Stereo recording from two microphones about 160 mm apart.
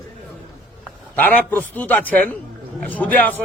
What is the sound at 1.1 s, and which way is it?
A man's voice, 10° left (ahead or behind).